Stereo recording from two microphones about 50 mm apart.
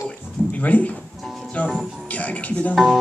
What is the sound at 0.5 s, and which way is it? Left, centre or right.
A man's voice, left.